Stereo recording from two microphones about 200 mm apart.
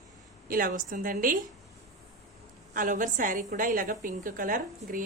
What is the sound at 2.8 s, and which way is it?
A woman's voice, 40° right (ahead or behind).